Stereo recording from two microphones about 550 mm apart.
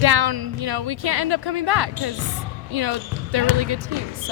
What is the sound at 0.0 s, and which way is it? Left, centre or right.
Speech, right.